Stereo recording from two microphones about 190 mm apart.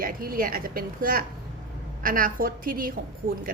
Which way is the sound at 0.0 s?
50° right (ahead or behind).